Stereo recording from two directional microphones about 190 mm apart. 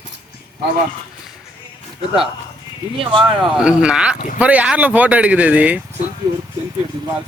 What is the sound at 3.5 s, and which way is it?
Speech, 5° right (ahead or behind).